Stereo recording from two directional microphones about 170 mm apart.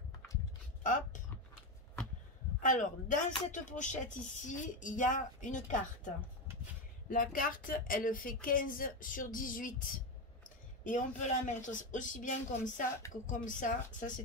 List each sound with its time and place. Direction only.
0.8 s speech: 50° left (ahead or behind)
2.6 s speech: 50° left (ahead or behind)